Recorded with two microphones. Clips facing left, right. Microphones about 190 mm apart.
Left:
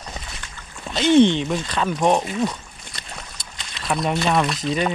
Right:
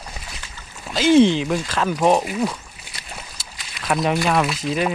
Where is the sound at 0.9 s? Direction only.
Centre (ahead or behind).